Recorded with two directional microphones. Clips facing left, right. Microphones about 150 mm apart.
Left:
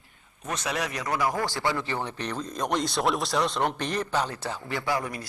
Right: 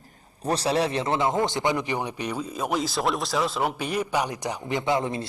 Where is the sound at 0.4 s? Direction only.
30° right (ahead or behind).